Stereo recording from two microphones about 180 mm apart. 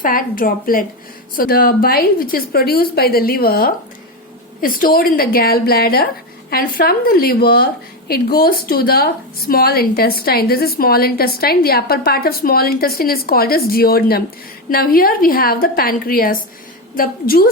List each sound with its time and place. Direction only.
0.0 s a woman's voice: 50° left (ahead or behind)